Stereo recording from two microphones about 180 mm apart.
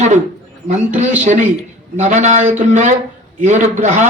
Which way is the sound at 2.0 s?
40° right (ahead or behind).